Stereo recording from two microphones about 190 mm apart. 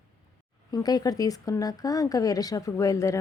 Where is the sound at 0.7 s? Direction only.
20° left (ahead or behind).